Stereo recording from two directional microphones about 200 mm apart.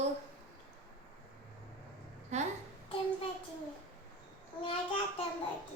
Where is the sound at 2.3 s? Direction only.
35° right (ahead or behind).